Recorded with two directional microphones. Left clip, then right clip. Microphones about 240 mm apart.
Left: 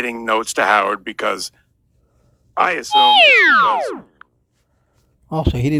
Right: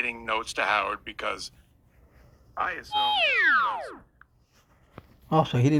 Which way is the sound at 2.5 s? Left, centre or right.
Left.